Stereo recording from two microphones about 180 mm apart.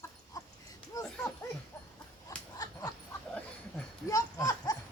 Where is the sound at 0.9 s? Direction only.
20° left (ahead or behind).